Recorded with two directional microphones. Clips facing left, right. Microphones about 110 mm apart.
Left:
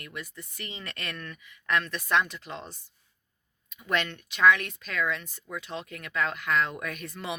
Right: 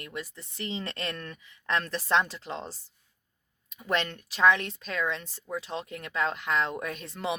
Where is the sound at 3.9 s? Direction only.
30° right (ahead or behind).